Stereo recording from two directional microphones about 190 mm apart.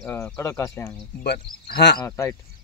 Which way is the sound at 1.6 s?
55° left (ahead or behind).